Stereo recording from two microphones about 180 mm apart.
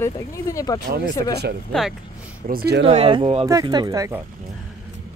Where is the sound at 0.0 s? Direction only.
15° left (ahead or behind).